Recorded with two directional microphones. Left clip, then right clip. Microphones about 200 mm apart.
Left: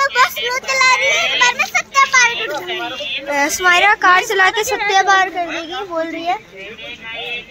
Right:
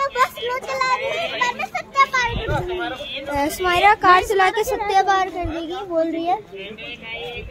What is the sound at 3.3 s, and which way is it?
A woman's voice, centre (ahead or behind).